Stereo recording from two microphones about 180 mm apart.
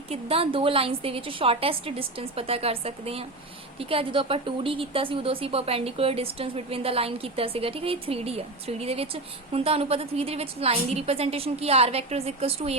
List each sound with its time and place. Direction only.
0.1 s speech: 30° right (ahead or behind)